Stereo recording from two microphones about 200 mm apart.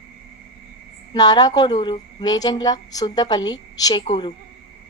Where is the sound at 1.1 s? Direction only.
20° left (ahead or behind).